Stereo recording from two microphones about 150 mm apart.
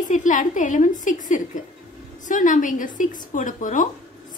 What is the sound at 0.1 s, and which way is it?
A woman's voice, 60° left (ahead or behind).